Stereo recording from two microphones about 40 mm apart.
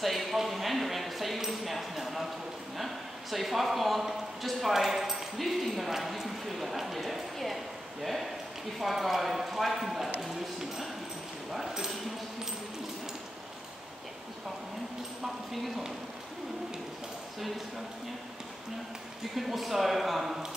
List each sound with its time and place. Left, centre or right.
0.0 s a sound: centre
2.8 s a man's voice: centre
19.3 s speech: centre